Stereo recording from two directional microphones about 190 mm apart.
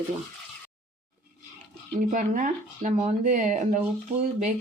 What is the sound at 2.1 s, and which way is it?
A woman's voice, 40° right (ahead or behind).